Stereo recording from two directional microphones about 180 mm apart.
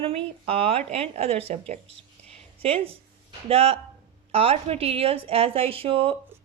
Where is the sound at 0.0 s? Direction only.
35° right (ahead or behind).